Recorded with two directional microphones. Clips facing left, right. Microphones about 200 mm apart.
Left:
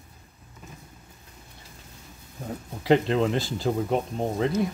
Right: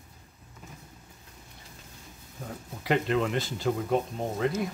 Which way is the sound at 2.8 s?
30° left (ahead or behind).